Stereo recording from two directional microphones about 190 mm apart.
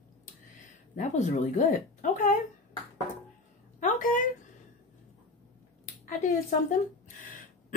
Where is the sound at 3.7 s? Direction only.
45° left (ahead or behind).